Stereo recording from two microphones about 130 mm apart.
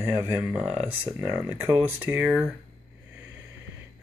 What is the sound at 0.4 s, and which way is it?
Speech, 5° right (ahead or behind).